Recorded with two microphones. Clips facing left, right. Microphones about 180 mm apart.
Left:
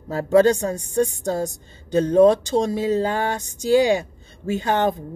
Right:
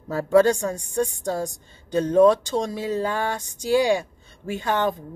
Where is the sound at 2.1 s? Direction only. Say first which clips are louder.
Left 2 dB; 25° left (ahead or behind).